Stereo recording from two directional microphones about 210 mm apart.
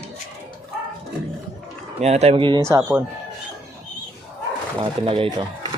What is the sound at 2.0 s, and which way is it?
Speech, 30° right (ahead or behind).